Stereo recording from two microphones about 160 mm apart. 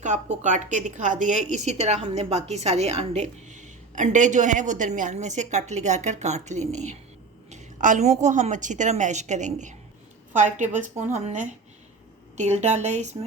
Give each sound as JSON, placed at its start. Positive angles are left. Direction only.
{"t": 0.0, "sound": "a woman's voice", "side_deg": -50}